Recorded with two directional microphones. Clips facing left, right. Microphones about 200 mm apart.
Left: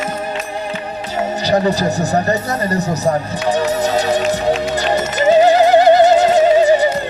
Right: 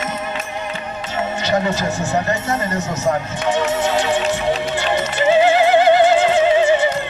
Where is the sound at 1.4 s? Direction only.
35° left (ahead or behind).